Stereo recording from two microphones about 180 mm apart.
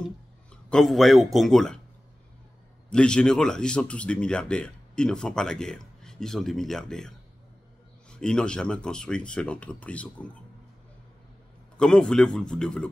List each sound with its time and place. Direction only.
0.5 s a man's voice: 5° left (ahead or behind)
2.9 s speech: 5° left (ahead or behind)
11.7 s speech: 5° left (ahead or behind)